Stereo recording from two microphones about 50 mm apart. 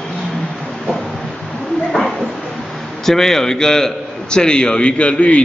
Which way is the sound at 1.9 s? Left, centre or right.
Centre.